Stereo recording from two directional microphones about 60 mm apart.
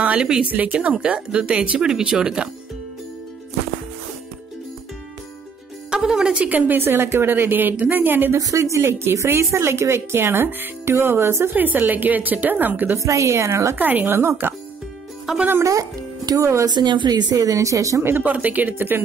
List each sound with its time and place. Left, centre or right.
0.0 s a sound: right
0.5 s speech: right
5.9 s music: centre
6.5 s a woman's voice: right
8.4 s a woman's voice: right
8.8 s speech: right
11.5 s a woman's voice: right
12.9 s a woman's voice: right
13.7 s a woman's voice: right
15.6 s a woman's voice: right
18.0 s a woman's voice: right
18.3 s speech: right